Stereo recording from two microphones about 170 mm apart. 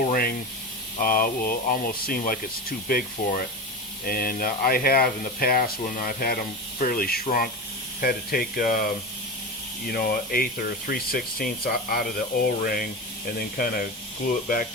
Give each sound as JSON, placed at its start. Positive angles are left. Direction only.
{"t": 0.0, "sound": "spray", "side_deg": 60}
{"t": 0.9, "sound": "speech", "side_deg": 55}
{"t": 4.0, "sound": "speech", "side_deg": 60}